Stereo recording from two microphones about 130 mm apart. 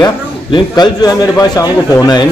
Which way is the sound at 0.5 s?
30° left (ahead or behind).